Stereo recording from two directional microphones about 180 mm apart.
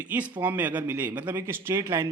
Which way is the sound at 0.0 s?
10° right (ahead or behind).